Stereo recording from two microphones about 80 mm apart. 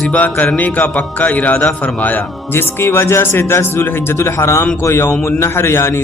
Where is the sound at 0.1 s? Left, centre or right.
Centre.